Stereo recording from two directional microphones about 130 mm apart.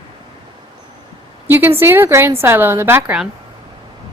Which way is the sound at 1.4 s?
15° right (ahead or behind).